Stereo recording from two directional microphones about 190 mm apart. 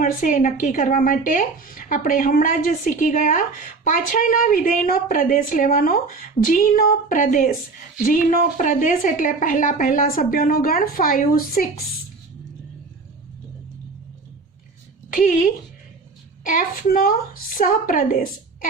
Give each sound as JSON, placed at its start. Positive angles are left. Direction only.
{"t": 0.0, "sound": "speech", "side_deg": 45}
{"t": 15.1, "sound": "a woman's voice", "side_deg": 50}